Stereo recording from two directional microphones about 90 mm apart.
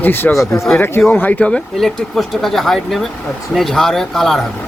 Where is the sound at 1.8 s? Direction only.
Centre (ahead or behind).